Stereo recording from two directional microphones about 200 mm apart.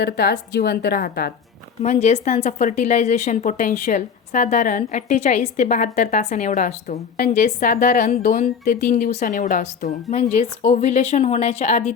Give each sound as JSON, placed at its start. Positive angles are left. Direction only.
{"t": 0.0, "sound": "a woman's voice", "side_deg": 55}
{"t": 1.8, "sound": "a woman's voice", "side_deg": 35}